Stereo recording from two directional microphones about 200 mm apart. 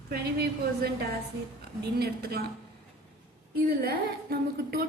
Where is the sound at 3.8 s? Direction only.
50° right (ahead or behind).